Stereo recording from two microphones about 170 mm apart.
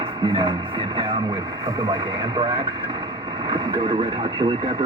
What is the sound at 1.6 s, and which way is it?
Speech, 25° right (ahead or behind).